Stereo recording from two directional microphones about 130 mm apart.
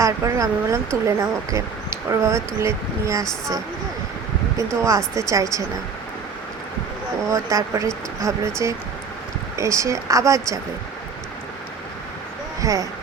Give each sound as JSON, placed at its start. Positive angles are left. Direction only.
{"t": 0.0, "sound": "speech", "side_deg": -25}
{"t": 4.8, "sound": "speech", "side_deg": -20}
{"t": 7.3, "sound": "speech", "side_deg": -25}
{"t": 12.6, "sound": "speech", "side_deg": -25}